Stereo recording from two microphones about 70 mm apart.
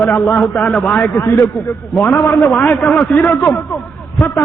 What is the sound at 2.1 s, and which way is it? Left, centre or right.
Speech, left.